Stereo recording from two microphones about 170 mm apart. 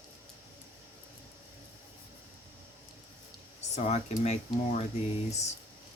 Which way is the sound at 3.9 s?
40° left (ahead or behind).